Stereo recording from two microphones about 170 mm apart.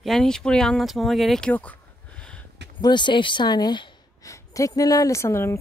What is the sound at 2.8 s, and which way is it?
A woman's voice, 25° left (ahead or behind).